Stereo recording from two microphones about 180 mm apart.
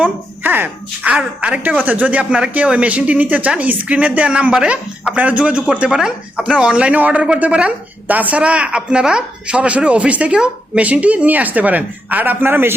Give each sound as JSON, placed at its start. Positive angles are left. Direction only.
{"t": 0.0, "sound": "speech", "side_deg": -10}